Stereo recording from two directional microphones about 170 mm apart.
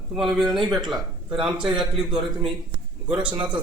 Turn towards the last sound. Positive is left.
turn(degrees=-5)  # may be behind; listen again after turning